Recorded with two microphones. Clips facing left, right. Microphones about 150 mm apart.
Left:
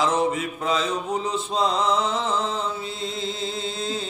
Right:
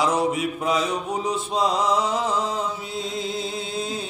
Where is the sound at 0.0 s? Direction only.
10° right (ahead or behind).